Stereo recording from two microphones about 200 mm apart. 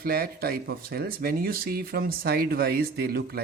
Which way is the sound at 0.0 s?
50° right (ahead or behind).